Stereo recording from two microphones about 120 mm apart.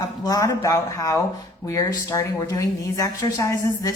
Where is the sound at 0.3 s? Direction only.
30° left (ahead or behind).